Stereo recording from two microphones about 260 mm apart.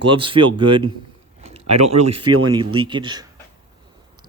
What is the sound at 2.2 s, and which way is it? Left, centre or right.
Speech, right.